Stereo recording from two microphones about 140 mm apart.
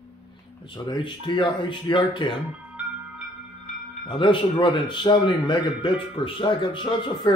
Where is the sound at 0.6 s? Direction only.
35° left (ahead or behind).